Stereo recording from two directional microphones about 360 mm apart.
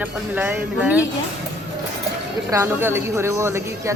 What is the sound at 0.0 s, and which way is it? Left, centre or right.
Speech, centre.